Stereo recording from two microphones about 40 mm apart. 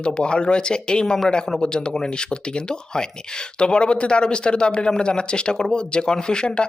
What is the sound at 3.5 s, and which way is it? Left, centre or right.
Speech, left.